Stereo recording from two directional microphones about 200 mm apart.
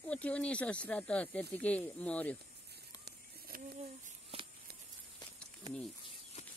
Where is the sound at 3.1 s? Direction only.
50° right (ahead or behind).